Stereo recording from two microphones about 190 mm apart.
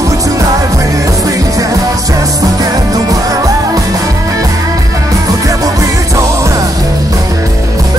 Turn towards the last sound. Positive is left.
turn(degrees=-20)  # may be behind; listen again after turning